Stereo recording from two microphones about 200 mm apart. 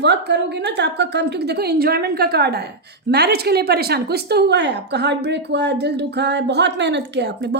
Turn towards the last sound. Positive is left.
turn(degrees=-60)  # may be behind; listen again after turning